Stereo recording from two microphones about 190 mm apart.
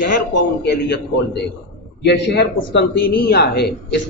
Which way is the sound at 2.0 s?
60° left (ahead or behind).